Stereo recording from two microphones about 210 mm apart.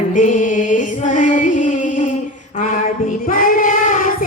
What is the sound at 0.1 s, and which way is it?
Music, 40° left (ahead or behind).